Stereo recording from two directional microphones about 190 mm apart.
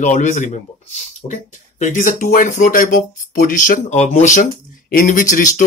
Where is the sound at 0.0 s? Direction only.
40° left (ahead or behind).